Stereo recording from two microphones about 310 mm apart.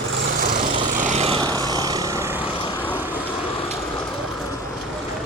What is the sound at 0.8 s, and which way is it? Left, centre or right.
Vehicle, right.